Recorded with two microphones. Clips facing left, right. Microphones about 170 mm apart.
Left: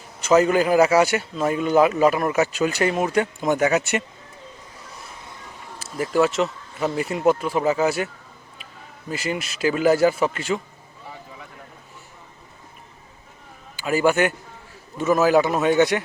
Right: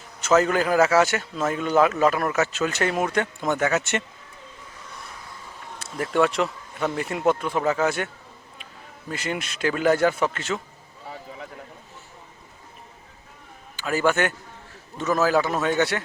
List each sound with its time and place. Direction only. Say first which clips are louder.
0.3 s speech: left 3 dB; 10° left (ahead or behind)
5.8 s speech: left 2 dB; 5° left (ahead or behind)
13.7 s a man's voice: left 3 dB; 10° left (ahead or behind)